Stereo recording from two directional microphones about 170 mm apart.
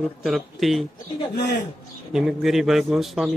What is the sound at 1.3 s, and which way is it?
Speech, 80° left.